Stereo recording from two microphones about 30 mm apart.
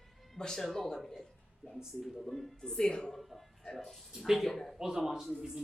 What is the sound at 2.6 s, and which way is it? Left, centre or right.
Speech, left.